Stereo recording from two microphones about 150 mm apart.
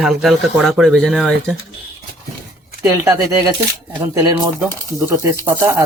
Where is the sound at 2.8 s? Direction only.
20° right (ahead or behind).